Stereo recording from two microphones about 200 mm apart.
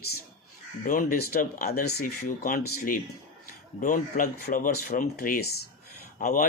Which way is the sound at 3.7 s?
40° left (ahead or behind).